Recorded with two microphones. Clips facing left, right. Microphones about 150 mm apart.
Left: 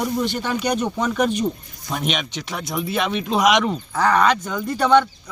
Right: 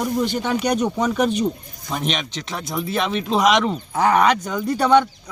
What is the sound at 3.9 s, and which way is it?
Speech, 20° right (ahead or behind).